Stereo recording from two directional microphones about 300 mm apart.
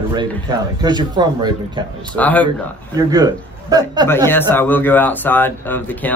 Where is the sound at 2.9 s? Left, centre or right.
Centre.